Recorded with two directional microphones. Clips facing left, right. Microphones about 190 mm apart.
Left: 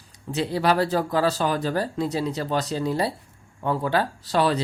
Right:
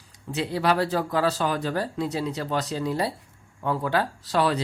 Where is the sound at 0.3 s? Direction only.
35° left (ahead or behind).